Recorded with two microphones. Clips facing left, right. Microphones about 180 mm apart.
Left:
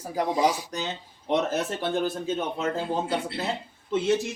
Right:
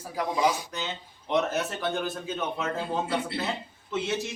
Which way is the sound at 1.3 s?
30° left (ahead or behind).